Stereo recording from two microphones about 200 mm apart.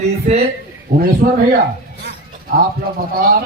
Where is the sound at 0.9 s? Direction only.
40° right (ahead or behind).